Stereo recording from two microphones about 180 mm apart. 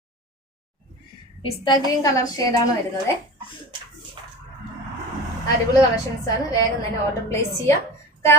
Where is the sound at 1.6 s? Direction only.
20° left (ahead or behind).